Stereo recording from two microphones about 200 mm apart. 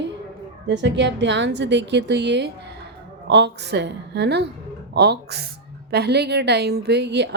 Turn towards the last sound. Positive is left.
turn(degrees=-60)  # may be behind; listen again after turning